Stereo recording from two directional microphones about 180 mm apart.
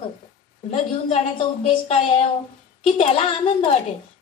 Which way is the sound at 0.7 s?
35° left (ahead or behind).